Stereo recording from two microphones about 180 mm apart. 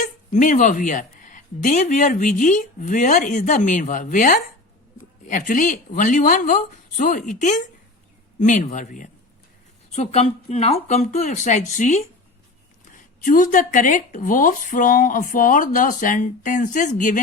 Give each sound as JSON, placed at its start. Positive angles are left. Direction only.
{"t": 0.3, "sound": "speech", "side_deg": 45}
{"t": 9.9, "sound": "speech", "side_deg": 35}
{"t": 13.2, "sound": "speech", "side_deg": 45}